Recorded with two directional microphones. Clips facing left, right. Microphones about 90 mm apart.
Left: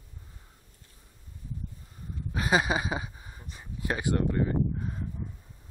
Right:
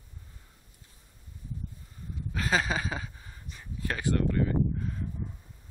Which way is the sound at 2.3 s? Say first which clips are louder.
Left 3 dB; 15° left (ahead or behind).